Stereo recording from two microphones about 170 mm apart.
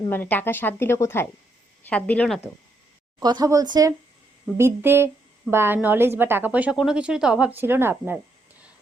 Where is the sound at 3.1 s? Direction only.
25° right (ahead or behind).